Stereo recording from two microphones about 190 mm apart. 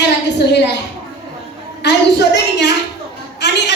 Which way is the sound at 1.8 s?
65° left (ahead or behind).